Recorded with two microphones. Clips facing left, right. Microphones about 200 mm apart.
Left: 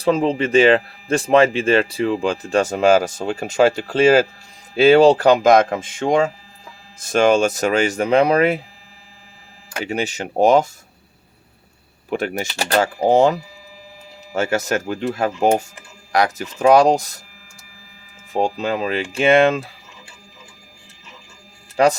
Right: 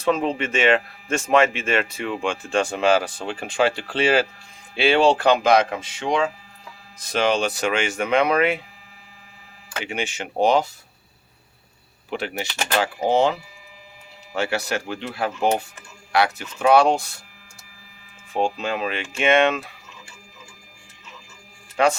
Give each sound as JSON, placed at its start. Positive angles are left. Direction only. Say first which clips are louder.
{"t": 0.0, "sound": "speech", "louder": "left 4 dB", "side_deg": 30}
{"t": 9.6, "sound": "speech", "louder": "left 5 dB", "side_deg": 40}
{"t": 12.1, "sound": "speech", "louder": "left 5 dB", "side_deg": 45}
{"t": 18.3, "sound": "speech", "louder": "left 3 dB", "side_deg": 40}
{"t": 21.8, "sound": "speech", "louder": "left 4 dB", "side_deg": 35}